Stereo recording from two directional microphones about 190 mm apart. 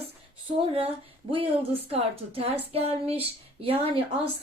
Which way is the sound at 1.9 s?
30° right (ahead or behind).